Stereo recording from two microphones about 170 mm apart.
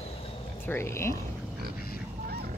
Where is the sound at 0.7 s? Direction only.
15° left (ahead or behind).